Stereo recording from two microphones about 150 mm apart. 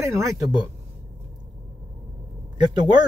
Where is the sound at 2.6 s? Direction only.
30° right (ahead or behind).